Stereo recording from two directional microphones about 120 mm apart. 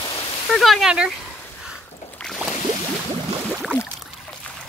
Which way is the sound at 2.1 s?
5° left (ahead or behind).